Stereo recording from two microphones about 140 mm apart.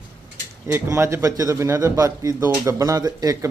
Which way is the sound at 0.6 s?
20° right (ahead or behind).